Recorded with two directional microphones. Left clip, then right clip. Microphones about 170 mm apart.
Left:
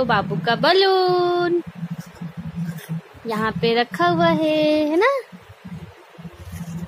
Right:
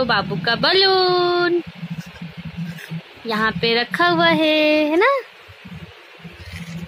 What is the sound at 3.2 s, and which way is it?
Speech, 5° left (ahead or behind).